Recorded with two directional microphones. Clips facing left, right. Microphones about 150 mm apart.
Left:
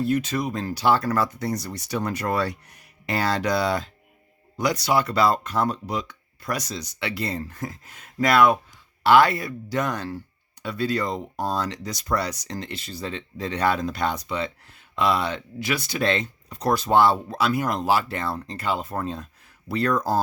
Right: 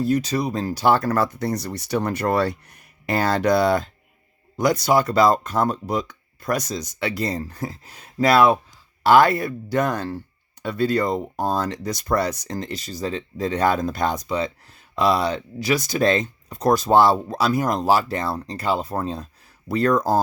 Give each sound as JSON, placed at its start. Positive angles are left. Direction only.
{"t": 0.0, "sound": "speech", "side_deg": -40}
{"t": 9.0, "sound": "speech", "side_deg": -45}